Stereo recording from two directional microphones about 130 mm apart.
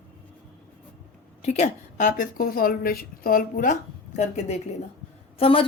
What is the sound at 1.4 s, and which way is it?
A woman's voice, 60° left (ahead or behind).